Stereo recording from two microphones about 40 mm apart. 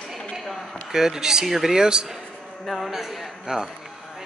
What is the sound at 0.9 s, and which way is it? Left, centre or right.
Speech, centre.